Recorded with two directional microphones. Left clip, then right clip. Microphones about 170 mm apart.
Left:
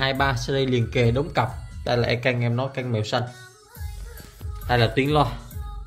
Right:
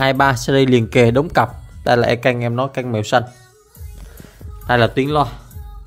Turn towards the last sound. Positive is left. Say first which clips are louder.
# right 4 dB
turn(degrees=-30)  # may be behind; listen again after turning